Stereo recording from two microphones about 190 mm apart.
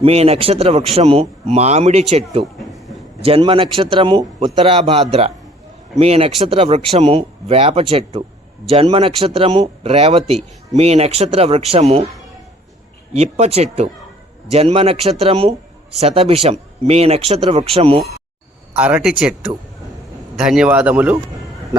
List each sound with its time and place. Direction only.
0.0 s speech: 35° right (ahead or behind)
2.6 s a sound: centre (ahead or behind)
3.2 s a man's voice: 30° right (ahead or behind)
13.1 s speech: 35° right (ahead or behind)
18.8 s speech: 5° right (ahead or behind)
20.3 s a man's voice: centre (ahead or behind)